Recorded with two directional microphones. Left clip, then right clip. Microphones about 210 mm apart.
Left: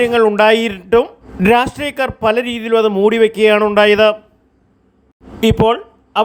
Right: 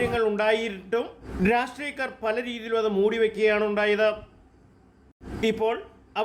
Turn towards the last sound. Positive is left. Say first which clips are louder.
# left 13 dB
turn(degrees=35)  # may be behind; listen again after turning